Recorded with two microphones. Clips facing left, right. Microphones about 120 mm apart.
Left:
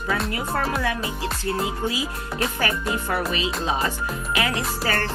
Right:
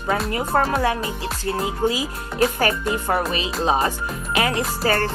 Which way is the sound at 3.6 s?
30° right (ahead or behind).